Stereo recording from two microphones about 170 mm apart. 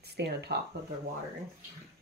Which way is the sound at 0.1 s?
75° right (ahead or behind).